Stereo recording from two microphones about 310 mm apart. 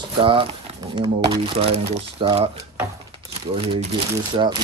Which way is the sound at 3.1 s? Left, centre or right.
Centre.